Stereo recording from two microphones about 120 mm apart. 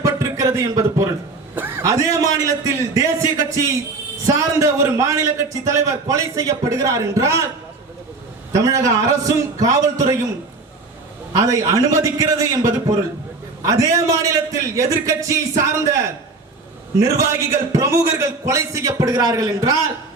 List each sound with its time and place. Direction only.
0.0 s a sound: 30° right (ahead or behind)
1.5 s a man's voice: 15° right (ahead or behind)
4.4 s a man's voice: 25° right (ahead or behind)
8.5 s a man's voice: 30° right (ahead or behind)
11.3 s a man's voice: 30° right (ahead or behind)